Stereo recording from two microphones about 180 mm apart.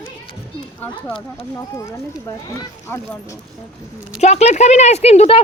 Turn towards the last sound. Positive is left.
turn(degrees=35)  # may be behind; listen again after turning